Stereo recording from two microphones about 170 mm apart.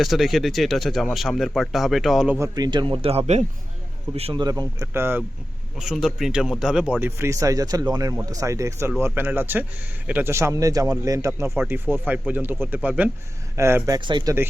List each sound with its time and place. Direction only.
0.0 s speech: centre (ahead or behind)
2.4 s a man's voice: 25° right (ahead or behind)
4.4 s a man's voice: 20° right (ahead or behind)